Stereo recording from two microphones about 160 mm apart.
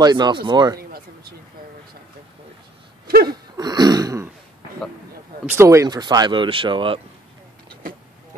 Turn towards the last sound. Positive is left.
turn(degrees=-30)  # may be behind; listen again after turning